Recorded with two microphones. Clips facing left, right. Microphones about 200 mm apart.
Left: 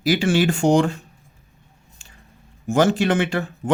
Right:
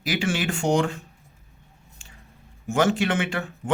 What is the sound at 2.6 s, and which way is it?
Speech, 35° left (ahead or behind).